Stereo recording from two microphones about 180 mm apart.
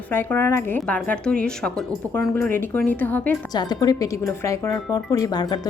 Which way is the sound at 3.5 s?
20° left (ahead or behind).